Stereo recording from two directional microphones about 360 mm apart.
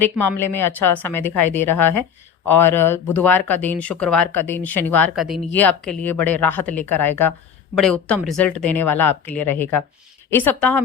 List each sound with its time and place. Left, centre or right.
0.0 s speech: centre